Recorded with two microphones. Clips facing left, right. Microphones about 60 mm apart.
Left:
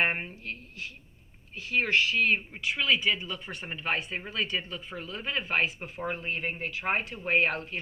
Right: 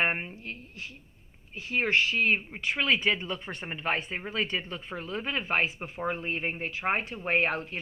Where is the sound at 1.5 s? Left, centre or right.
Right.